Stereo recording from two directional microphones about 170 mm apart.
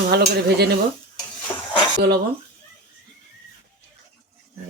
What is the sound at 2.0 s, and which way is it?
Speech, 70° right (ahead or behind).